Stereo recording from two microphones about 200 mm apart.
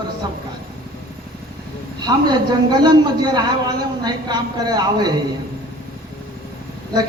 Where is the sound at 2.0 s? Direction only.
20° right (ahead or behind).